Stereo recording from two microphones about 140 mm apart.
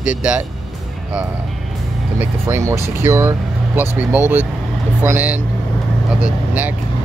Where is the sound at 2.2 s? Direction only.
20° right (ahead or behind).